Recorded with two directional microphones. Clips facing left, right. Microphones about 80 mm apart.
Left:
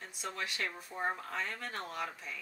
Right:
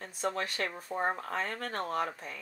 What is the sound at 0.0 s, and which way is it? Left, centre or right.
Speech, right.